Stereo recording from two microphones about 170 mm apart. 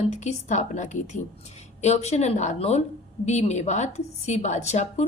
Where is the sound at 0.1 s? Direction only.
45° left (ahead or behind).